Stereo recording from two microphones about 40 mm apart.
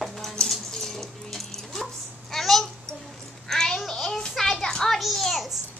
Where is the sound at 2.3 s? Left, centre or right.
Centre.